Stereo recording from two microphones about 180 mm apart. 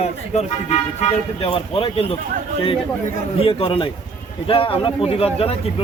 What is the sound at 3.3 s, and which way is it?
Speech, 30° left (ahead or behind).